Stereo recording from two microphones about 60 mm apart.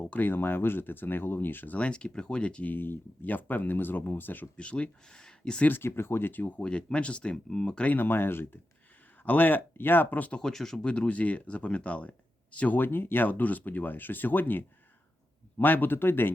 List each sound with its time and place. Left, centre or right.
0.0 s a sound: left
0.3 s speech: left; by 2.7 s centre
2.7 s speech: left
4.5 s speech: centre
5.6 s speech: left
6.6 s speech: centre
7.9 s speech: left
10.4 s speech: centre
10.9 s speech: left
12.7 s speech: left